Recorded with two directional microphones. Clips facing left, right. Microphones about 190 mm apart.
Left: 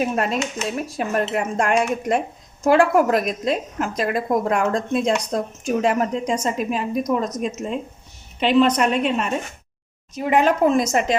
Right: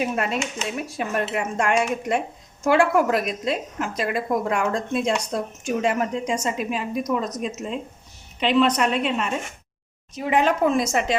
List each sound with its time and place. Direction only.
0.0 s a woman's voice: 40° left (ahead or behind)